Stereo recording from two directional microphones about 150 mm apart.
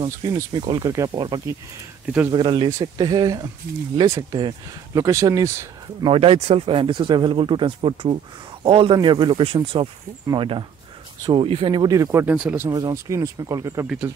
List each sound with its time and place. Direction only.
0.0 s speech: 25° right (ahead or behind)
6.0 s speech: 40° right (ahead or behind); by 12.7 s 15° right (ahead or behind)
12.7 s speech: 25° right (ahead or behind)